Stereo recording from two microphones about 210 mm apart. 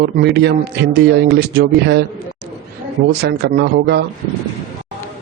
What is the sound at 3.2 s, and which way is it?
Speech, 50° right (ahead or behind).